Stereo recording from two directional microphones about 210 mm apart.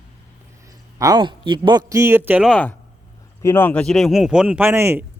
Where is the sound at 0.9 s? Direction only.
20° right (ahead or behind); by 2.6 s centre (ahead or behind).